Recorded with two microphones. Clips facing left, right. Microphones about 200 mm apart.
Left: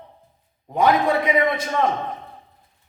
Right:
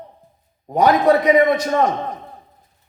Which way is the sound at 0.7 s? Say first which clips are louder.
Right 4 dB; 40° right (ahead or behind).